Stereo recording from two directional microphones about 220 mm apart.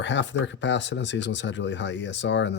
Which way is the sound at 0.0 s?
55° left (ahead or behind).